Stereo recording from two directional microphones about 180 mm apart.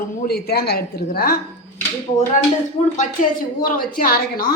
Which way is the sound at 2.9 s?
45° left (ahead or behind).